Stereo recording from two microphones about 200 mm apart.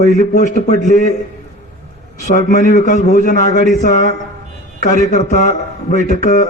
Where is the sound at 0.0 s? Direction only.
35° left (ahead or behind).